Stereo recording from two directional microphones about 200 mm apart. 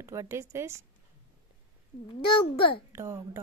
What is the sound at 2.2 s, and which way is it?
Speech, 25° left (ahead or behind).